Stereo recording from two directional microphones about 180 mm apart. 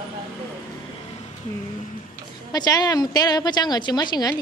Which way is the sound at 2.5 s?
20° left (ahead or behind).